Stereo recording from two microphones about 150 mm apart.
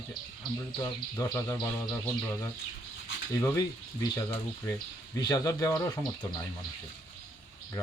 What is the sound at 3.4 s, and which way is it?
Speech, 20° left (ahead or behind).